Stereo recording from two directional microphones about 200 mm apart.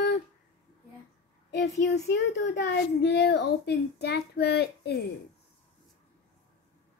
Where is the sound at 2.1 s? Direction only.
60° left (ahead or behind).